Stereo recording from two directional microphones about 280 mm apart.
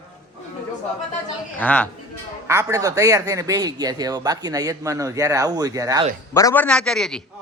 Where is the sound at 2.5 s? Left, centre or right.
Centre.